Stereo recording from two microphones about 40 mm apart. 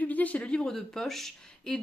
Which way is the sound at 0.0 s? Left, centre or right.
Left.